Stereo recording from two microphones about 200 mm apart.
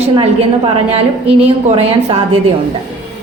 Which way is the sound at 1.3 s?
30° right (ahead or behind).